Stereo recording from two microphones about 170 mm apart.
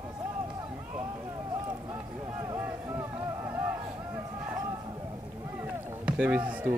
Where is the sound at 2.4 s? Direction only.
15° right (ahead or behind).